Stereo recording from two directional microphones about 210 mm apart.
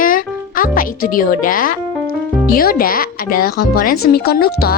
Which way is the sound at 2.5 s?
45° left (ahead or behind).